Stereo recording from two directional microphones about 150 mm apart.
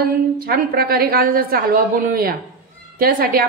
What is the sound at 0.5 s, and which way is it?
A woman's voice, 85° right.